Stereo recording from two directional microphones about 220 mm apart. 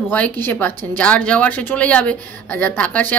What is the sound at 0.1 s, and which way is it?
A woman's voice, 10° left (ahead or behind).